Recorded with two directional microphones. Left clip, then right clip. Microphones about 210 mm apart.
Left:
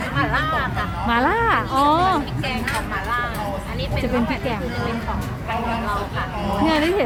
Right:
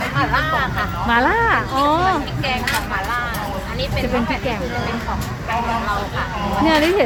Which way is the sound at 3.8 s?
Centre (ahead or behind).